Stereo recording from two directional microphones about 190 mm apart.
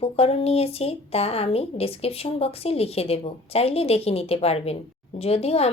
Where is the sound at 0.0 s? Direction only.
30° left (ahead or behind).